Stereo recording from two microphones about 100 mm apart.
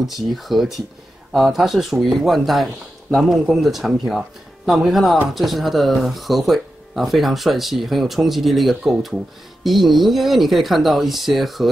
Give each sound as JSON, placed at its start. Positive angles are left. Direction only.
{"t": 0.0, "sound": "speech", "side_deg": 0}